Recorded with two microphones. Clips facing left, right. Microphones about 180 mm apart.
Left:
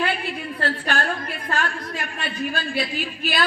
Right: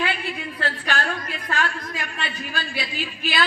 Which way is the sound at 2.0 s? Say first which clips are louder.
Left 3 dB; 45° left (ahead or behind).